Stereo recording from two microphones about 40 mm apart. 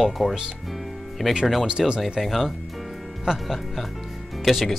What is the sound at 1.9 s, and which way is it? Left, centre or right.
Speech, centre.